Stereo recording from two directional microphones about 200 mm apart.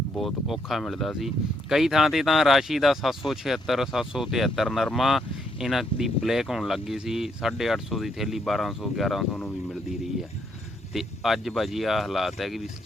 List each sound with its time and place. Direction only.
0.2 s speech: centre (ahead or behind)